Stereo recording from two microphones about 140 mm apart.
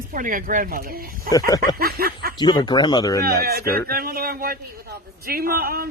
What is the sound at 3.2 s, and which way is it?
A man's voice, 90° right.